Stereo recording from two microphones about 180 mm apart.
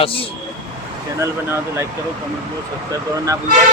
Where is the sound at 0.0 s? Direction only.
30° left (ahead or behind).